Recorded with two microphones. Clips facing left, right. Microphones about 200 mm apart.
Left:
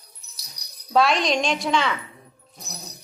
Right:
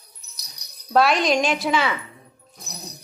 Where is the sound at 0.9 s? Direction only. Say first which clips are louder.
Right 2 dB; centre (ahead or behind).